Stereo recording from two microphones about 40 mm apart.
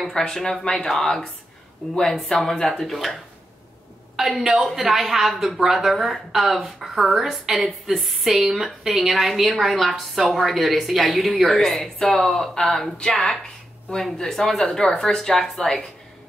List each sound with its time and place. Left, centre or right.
0.1 s speech: centre
4.2 s a woman's voice: centre
12.9 s speech: centre